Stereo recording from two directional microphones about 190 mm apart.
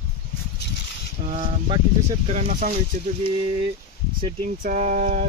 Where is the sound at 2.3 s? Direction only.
40° right (ahead or behind).